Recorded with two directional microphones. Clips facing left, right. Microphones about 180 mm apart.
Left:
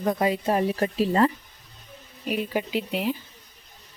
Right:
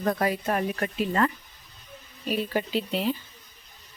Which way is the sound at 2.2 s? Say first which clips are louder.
Even; 15° left (ahead or behind).